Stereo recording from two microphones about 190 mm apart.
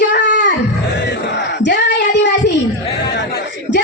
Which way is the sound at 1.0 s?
65° left (ahead or behind).